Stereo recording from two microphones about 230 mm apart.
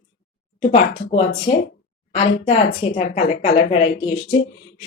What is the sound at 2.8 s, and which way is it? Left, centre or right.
Speech, left.